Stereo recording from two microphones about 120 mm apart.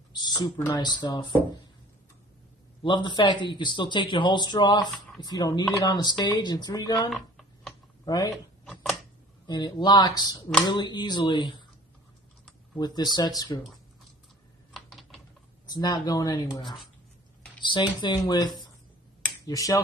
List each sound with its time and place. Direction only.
0.1 s speech: 35° left (ahead or behind)
2.8 s speech: 40° left (ahead or behind)
7.1 s a sound: centre (ahead or behind)
8.0 s speech: 35° left (ahead or behind)
9.5 s speech: 35° left (ahead or behind)
12.7 s speech: 35° left (ahead or behind)
14.7 s typing: centre (ahead or behind)
15.7 s speech: 35° left (ahead or behind)